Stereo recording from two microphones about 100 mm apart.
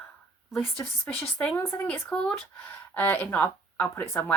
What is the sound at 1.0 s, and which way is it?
Speech, 25° left (ahead or behind).